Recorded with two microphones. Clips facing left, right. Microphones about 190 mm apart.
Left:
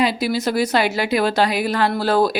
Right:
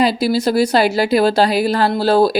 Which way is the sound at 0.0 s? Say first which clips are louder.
Right 4 dB; 35° right (ahead or behind).